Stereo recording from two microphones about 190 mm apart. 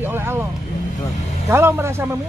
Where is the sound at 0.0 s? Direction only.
10° right (ahead or behind).